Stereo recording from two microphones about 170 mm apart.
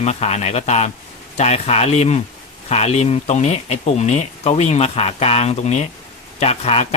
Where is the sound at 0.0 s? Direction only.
40° left (ahead or behind).